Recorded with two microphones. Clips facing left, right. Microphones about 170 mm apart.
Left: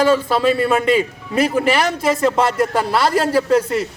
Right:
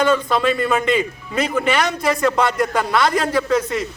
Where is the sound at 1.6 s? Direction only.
30° left (ahead or behind).